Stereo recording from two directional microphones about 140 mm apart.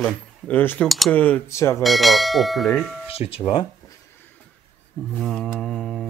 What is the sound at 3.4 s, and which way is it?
Speech, 30° left (ahead or behind).